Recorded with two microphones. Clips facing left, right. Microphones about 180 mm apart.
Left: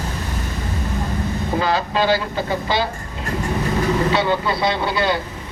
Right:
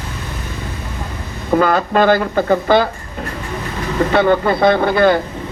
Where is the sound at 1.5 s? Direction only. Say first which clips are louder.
Right 8 dB; 55° right (ahead or behind).